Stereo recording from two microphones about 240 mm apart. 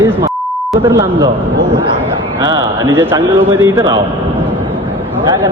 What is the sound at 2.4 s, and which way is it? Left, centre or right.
A man's voice, centre.